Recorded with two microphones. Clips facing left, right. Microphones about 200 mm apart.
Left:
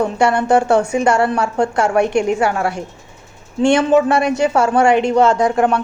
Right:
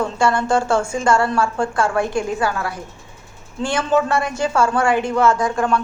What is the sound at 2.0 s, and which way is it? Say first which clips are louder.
Speech: left 5 dB; 70° left (ahead or behind).